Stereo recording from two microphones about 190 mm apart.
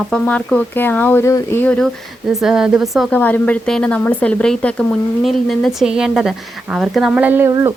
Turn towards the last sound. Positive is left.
turn(degrees=-15)  # may be behind; listen again after turning